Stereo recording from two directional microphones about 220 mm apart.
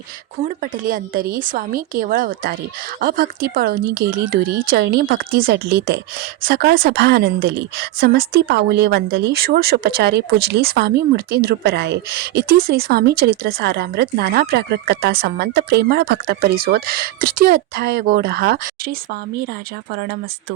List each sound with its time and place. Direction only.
0.4 s a woman's voice: 40° right (ahead or behind)